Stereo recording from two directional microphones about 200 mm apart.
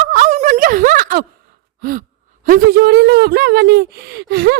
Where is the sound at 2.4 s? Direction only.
50° right (ahead or behind).